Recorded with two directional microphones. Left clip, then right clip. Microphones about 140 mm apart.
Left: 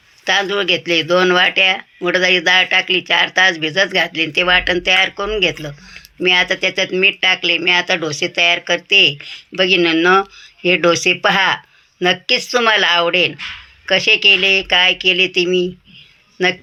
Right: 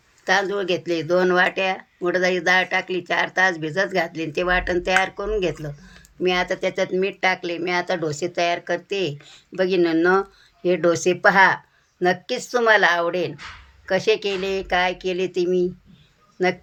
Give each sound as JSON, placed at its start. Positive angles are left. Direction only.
{"t": 0.3, "sound": "speech", "side_deg": 20}